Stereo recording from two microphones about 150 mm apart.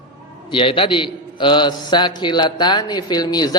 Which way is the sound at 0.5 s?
35° left (ahead or behind).